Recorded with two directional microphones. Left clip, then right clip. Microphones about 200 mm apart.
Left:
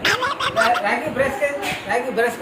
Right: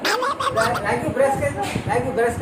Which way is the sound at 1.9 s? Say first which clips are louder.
Even; centre (ahead or behind).